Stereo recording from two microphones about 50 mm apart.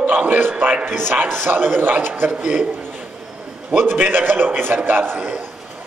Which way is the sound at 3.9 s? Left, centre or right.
Right.